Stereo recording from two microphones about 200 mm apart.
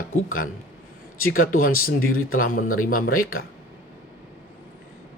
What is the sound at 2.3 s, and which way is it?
Speech, 45° left (ahead or behind).